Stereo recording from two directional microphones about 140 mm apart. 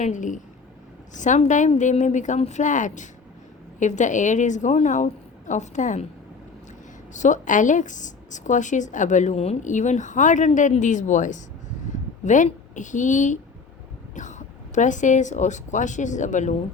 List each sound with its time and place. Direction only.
0.0 s a woman's voice: 65° left (ahead or behind)
7.1 s a woman's voice: 60° left (ahead or behind)